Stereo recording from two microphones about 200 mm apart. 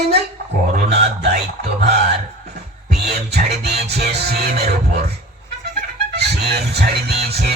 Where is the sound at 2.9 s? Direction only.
55° right (ahead or behind).